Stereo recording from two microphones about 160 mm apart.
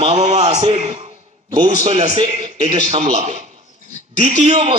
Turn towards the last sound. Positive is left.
turn(degrees=-40)  # may be behind; listen again after turning